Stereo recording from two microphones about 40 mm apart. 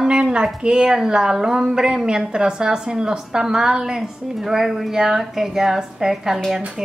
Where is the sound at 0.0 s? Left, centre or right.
Right.